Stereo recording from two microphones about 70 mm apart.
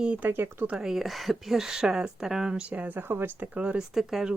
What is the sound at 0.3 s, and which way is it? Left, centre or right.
Speech, right.